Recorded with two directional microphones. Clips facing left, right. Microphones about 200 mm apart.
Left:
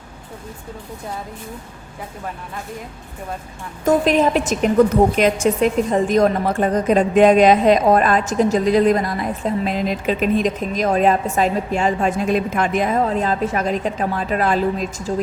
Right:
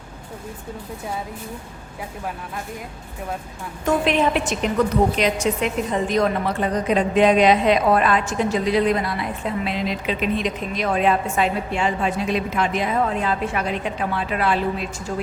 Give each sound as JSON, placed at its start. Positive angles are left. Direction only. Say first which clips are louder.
{"t": 3.8, "sound": "a woman's voice", "louder": "left 4 dB", "side_deg": 40}